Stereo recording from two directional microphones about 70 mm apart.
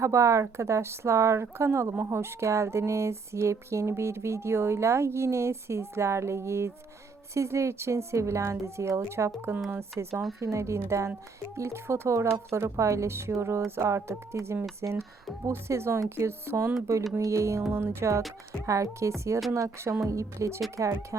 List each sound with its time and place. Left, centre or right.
0.0 s a woman's voice: right
17.7 s a woman's voice: right